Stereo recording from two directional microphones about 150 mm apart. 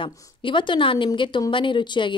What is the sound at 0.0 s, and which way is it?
A woman's voice, 35° left (ahead or behind).